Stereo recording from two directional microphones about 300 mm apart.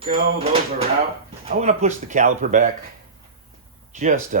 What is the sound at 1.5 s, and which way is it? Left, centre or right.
Speech, right.